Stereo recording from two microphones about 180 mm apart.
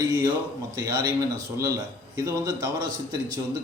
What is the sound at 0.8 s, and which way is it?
A man's voice, 20° right (ahead or behind).